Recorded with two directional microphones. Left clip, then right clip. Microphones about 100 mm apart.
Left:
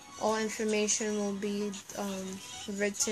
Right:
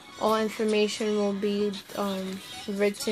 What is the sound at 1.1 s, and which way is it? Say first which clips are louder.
Speech: right 7 dB; 10° right (ahead or behind).